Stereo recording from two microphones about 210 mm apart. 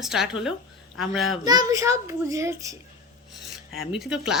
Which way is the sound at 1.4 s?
20° right (ahead or behind).